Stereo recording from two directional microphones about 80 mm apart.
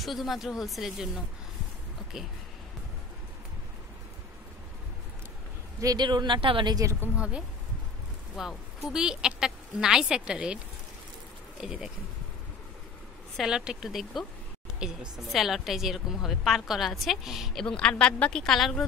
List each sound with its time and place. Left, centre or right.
0.0 s a woman's voice: centre
5.9 s speech: right
7.2 s speech: centre
11.6 s speech: centre
13.4 s a woman's voice: centre
17.6 s speech: centre